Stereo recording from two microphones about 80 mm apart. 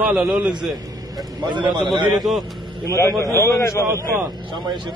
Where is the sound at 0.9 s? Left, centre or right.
Right.